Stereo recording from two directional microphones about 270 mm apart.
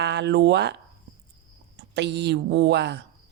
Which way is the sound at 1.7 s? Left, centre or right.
Right.